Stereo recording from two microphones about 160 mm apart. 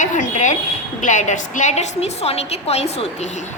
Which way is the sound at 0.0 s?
50° left (ahead or behind).